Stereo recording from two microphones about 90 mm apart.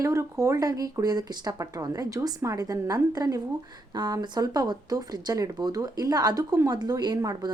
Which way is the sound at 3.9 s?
50° right (ahead or behind).